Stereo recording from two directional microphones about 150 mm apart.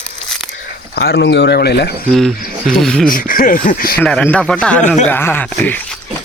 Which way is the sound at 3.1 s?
70° left (ahead or behind).